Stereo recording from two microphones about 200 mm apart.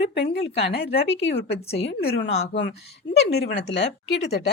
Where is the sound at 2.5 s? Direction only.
60° left (ahead or behind).